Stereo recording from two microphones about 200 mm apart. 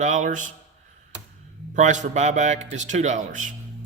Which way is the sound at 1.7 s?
40° right (ahead or behind).